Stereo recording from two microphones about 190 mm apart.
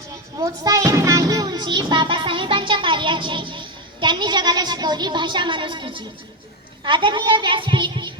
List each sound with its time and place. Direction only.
0.3 s music: 20° right (ahead or behind)
6.8 s a child's voice: 25° right (ahead or behind)